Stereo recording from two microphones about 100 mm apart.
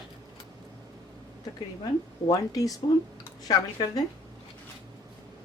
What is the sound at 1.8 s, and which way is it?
Speech, 40° left (ahead or behind).